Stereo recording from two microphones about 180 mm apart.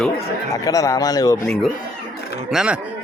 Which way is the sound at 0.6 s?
20° left (ahead or behind).